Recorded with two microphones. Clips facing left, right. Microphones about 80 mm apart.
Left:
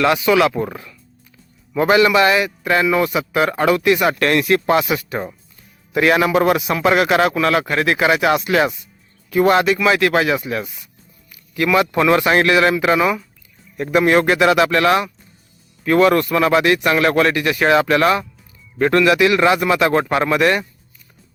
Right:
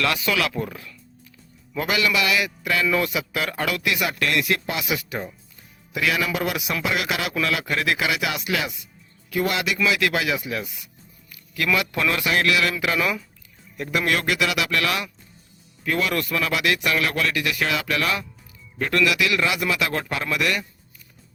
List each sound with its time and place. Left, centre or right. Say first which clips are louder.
0.0 s a man's voice: left 9 dB; left
11.3 s a man's voice: left 6 dB; left